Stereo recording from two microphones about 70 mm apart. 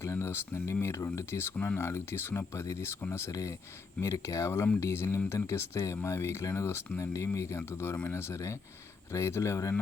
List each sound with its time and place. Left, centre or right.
0.0 s speech: left